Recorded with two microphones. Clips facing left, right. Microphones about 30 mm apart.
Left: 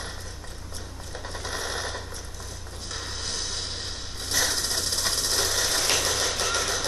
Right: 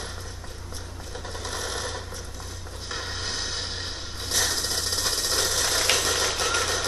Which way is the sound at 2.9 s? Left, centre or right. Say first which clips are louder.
Right 2 dB; centre.